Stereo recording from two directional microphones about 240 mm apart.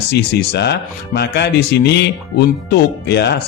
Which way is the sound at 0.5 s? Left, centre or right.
Left.